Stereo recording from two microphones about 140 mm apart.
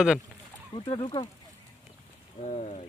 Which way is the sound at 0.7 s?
35° left (ahead or behind).